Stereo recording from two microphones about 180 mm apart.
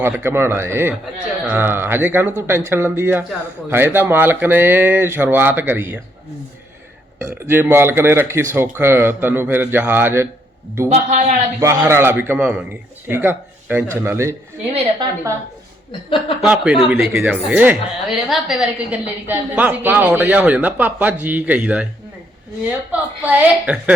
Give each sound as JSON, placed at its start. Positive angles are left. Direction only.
{"t": 0.0, "sound": "a woman's voice", "side_deg": -10}
{"t": 7.2, "sound": "a woman's voice", "side_deg": -15}
{"t": 10.8, "sound": "a man's voice", "side_deg": -40}
{"t": 11.6, "sound": "a woman's voice", "side_deg": -15}
{"t": 16.4, "sound": "a woman's voice", "side_deg": -5}